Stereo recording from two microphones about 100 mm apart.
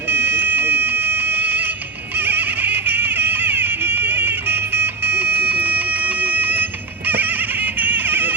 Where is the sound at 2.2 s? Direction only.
20° right (ahead or behind).